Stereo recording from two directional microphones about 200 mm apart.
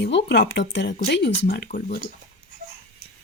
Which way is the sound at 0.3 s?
55° left (ahead or behind).